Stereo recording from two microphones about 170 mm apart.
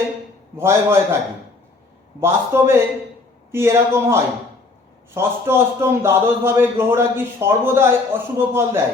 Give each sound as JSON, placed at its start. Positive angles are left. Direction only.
{"t": 0.5, "sound": "a man's voice", "side_deg": -15}
{"t": 2.2, "sound": "a man's voice", "side_deg": -15}